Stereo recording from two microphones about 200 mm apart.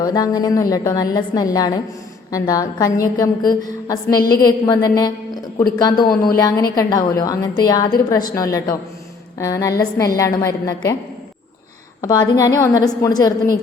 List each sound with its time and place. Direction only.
0.0 s a woman's voice: 20° left (ahead or behind)
6.3 s a woman's voice: 20° left (ahead or behind)
12.0 s a woman's voice: 20° left (ahead or behind)